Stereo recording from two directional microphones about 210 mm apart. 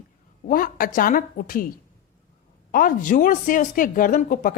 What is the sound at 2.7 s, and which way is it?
A woman's voice, 40° left (ahead or behind).